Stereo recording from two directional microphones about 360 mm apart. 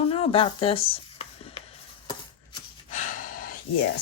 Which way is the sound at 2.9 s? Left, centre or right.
Left.